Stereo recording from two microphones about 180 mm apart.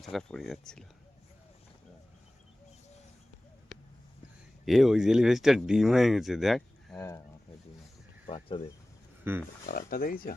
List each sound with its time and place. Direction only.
0.0 s speech: centre (ahead or behind)
4.6 s speech: centre (ahead or behind)
8.3 s speech: 30° left (ahead or behind)
9.2 s speech: 10° right (ahead or behind)
9.6 s speech: 55° left (ahead or behind)